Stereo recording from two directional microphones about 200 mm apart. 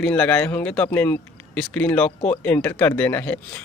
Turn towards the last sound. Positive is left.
turn(degrees=10)  # may be behind; listen again after turning